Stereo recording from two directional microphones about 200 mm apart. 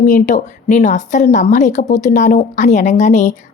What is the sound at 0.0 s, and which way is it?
A woman's voice, 40° left (ahead or behind).